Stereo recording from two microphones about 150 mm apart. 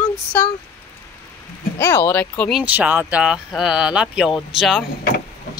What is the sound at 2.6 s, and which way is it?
Speech, 10° right (ahead or behind).